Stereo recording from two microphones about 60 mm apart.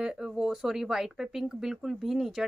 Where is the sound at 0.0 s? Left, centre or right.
Centre.